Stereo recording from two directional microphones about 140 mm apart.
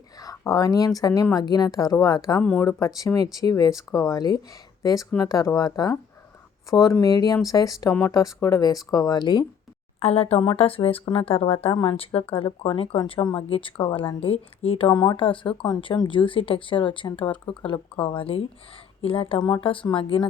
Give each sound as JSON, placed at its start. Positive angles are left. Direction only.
{"t": 0.2, "sound": "speech", "side_deg": 25}
{"t": 2.4, "sound": "speech", "side_deg": 10}
{"t": 2.6, "sound": "speech", "side_deg": 25}
{"t": 10.0, "sound": "speech", "side_deg": 45}
{"t": 14.8, "sound": "speech", "side_deg": 30}